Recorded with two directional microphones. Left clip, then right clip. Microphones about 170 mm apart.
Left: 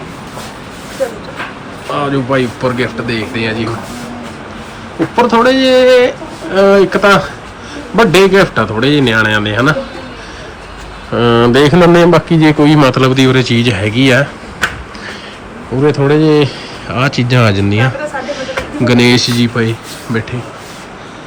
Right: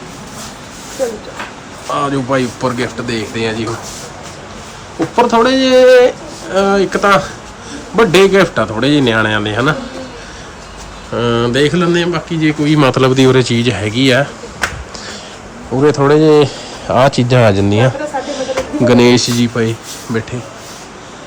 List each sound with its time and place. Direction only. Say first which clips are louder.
1.9 s speech: left 1 dB; 5° right (ahead or behind)
5.1 s speech: left 1 dB; 5° right (ahead or behind)
11.1 s a man's voice: left 5 dB; 5° left (ahead or behind)
12.8 s speech: left 1 dB; 5° right (ahead or behind)
15.7 s speech: right 1 dB; 5° right (ahead or behind)
16.0 s speech: right 2 dB; 65° right (ahead or behind)
16.9 s speech: right 4 dB; 15° right (ahead or behind)